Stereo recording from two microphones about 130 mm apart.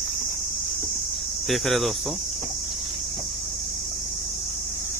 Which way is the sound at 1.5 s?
Centre (ahead or behind).